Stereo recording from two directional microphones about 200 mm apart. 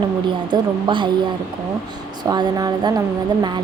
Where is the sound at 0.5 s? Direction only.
25° right (ahead or behind).